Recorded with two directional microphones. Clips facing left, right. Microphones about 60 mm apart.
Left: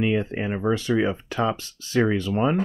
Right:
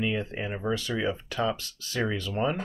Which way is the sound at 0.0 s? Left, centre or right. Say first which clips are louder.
Left 6 dB; left.